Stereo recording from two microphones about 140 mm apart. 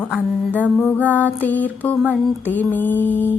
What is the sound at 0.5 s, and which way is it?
Mantra, 10° left (ahead or behind).